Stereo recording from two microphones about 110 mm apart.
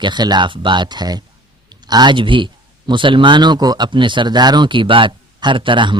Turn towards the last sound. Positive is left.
turn(degrees=-50)  # may be behind; listen again after turning